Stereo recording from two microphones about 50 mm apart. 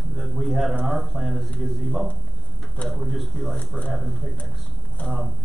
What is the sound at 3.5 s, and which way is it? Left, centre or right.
Speech, left.